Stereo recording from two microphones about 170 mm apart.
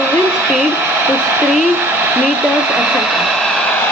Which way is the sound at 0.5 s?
10° right (ahead or behind).